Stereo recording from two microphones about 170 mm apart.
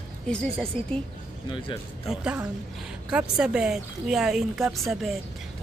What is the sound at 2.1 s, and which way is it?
Speech, 5° right (ahead or behind).